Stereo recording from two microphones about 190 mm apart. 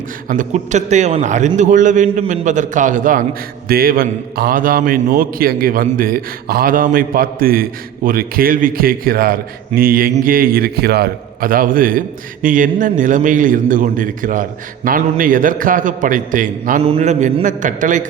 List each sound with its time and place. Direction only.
0.3 s a man's voice: 40° right (ahead or behind)
16.8 s a man's voice: 35° right (ahead or behind)